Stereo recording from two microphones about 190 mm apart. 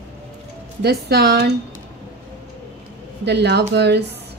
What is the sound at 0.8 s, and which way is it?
Speech, 60° right (ahead or behind).